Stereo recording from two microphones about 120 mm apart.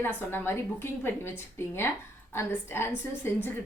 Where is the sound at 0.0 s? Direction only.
20° left (ahead or behind).